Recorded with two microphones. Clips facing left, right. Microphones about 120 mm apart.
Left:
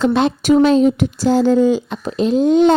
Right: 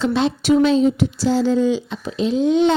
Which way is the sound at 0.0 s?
55° left (ahead or behind).